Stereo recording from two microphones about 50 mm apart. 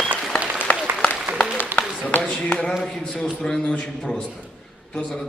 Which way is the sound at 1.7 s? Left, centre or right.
Left.